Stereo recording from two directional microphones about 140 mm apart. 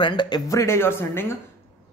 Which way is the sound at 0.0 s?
35° left (ahead or behind).